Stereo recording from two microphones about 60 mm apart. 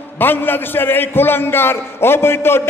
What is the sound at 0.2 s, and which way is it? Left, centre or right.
A man's voice, left.